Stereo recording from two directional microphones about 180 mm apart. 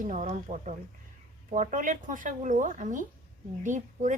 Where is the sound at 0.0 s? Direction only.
45° right (ahead or behind).